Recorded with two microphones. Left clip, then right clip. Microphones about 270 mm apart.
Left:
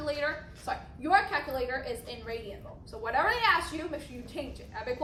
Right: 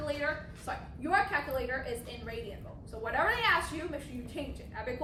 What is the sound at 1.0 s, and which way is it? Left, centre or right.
Speech, left.